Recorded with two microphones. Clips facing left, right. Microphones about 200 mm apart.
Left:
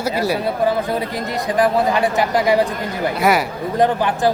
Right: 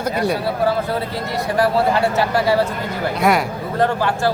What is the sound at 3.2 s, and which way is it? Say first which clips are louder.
Speech: even; centre (ahead or behind).